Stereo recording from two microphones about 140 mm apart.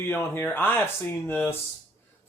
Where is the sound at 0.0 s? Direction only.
15° left (ahead or behind).